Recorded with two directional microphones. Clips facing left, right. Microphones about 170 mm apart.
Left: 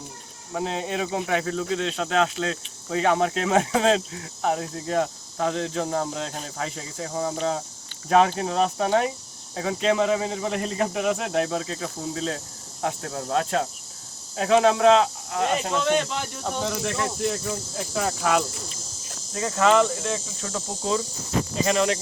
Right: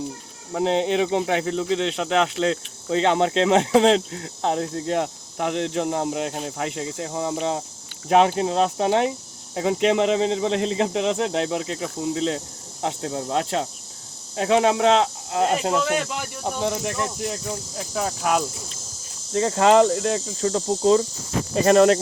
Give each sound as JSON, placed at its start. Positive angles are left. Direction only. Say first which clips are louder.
{"t": 0.5, "sound": "speech", "louder": "right 7 dB", "side_deg": -25}
{"t": 15.8, "sound": "speech", "louder": "left 1 dB", "side_deg": -5}
{"t": 16.4, "sound": "speech", "louder": "right 4 dB", "side_deg": -15}
{"t": 17.0, "sound": "speech", "louder": "left 1 dB", "side_deg": 0}
{"t": 19.3, "sound": "speech", "louder": "right 4 dB", "side_deg": -35}
{"t": 21.5, "sound": "speech", "louder": "right 9 dB", "side_deg": -45}